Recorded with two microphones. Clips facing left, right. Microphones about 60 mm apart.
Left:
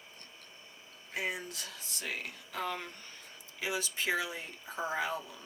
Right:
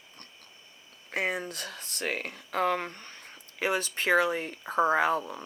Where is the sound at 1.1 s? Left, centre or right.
Right.